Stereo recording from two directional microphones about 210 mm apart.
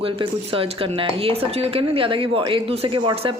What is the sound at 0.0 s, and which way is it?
A woman's voice, 25° right (ahead or behind).